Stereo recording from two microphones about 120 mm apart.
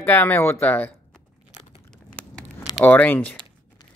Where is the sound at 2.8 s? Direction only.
15° left (ahead or behind).